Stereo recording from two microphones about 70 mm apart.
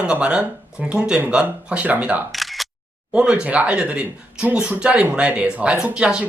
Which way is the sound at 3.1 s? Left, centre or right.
Centre.